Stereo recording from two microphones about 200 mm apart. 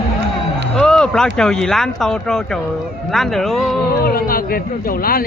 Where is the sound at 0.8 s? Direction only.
5° left (ahead or behind).